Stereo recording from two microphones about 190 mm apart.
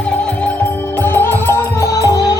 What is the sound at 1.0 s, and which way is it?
Music, 10° left (ahead or behind).